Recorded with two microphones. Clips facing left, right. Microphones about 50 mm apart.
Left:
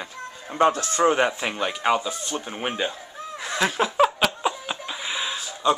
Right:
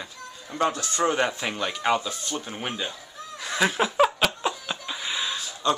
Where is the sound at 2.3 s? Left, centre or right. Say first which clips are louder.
Left 4 dB; centre.